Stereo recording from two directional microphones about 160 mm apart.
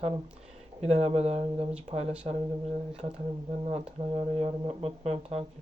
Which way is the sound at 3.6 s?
40° right (ahead or behind).